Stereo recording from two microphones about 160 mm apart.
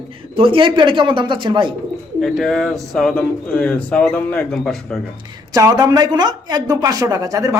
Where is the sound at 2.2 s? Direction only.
Centre (ahead or behind).